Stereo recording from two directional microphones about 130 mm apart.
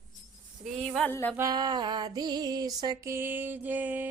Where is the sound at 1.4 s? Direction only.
30° right (ahead or behind).